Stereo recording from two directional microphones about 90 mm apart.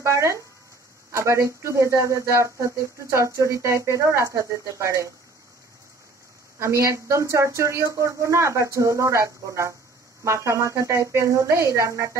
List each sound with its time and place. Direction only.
0.0 s speech: 35° right (ahead or behind)
6.6 s speech: 35° right (ahead or behind)